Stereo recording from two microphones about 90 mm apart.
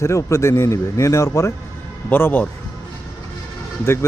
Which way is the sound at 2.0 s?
20° left (ahead or behind).